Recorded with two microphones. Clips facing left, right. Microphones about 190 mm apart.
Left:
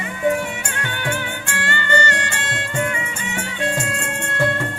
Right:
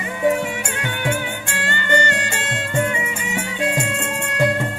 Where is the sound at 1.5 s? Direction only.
20° right (ahead or behind).